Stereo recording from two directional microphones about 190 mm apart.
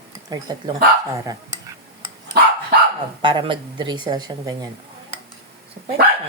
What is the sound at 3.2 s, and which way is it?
Speech, 25° right (ahead or behind).